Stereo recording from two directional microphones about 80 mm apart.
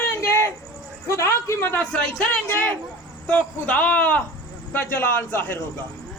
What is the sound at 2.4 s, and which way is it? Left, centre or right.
Speech, left.